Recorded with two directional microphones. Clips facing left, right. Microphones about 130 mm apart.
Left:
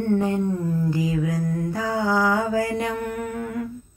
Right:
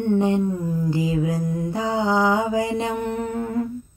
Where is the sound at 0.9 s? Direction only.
25° right (ahead or behind).